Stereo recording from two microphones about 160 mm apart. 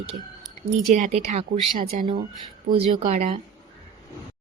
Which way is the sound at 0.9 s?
45° right (ahead or behind).